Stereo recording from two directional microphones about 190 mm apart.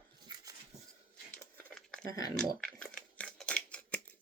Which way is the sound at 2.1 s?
20° left (ahead or behind).